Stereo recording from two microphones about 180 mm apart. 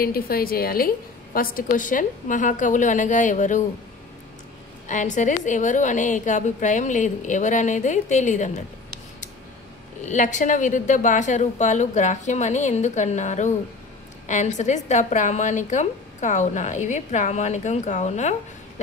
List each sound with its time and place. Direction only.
0.0 s a woman's voice: 55° left (ahead or behind)
4.8 s a woman's voice: 45° left (ahead or behind)
10.0 s a woman's voice: 45° left (ahead or behind)